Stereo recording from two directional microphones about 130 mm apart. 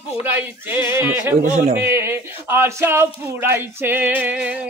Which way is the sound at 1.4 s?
75° right (ahead or behind).